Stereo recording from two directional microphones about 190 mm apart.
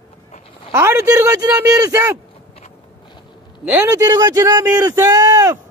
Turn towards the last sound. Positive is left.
turn(degrees=-20)  # may be behind; listen again after turning